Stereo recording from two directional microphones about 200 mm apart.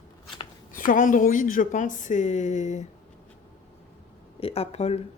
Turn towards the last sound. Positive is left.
turn(degrees=30)  # may be behind; listen again after turning